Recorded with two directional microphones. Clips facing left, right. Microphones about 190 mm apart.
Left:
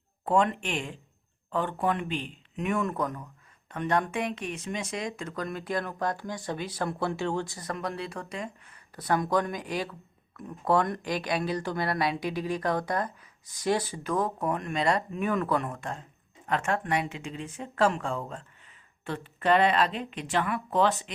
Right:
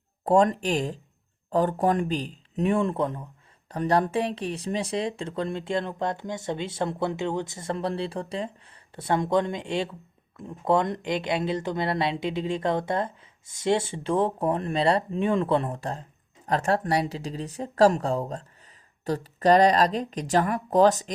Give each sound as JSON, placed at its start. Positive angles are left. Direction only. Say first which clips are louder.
{"t": 0.3, "sound": "speech", "louder": "right 5 dB", "side_deg": -40}